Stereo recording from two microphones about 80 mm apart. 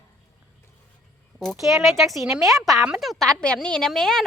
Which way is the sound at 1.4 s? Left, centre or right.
Centre.